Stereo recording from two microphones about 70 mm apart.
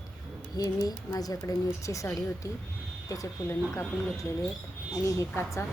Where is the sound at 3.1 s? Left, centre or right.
Left.